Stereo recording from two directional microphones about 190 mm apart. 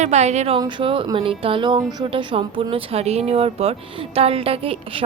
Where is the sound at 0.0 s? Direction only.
35° right (ahead or behind).